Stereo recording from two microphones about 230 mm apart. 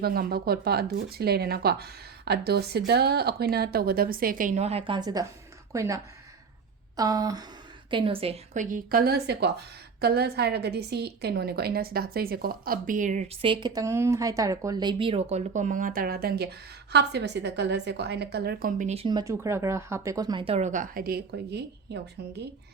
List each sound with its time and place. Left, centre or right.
0.0 s speech: right; by 5.2 s centre
5.7 s a sound: centre
7.9 s a woman's voice: right